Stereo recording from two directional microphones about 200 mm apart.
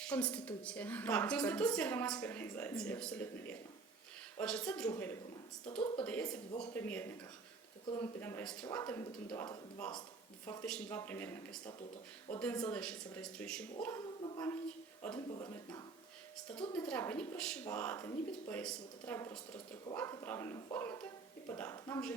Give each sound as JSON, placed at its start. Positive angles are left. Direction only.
{"t": 0.0, "sound": "a woman's voice", "side_deg": 5}
{"t": 13.8, "sound": "a sound", "side_deg": 15}
{"t": 15.1, "sound": "speech", "side_deg": 20}
{"t": 16.7, "sound": "a woman's voice", "side_deg": 5}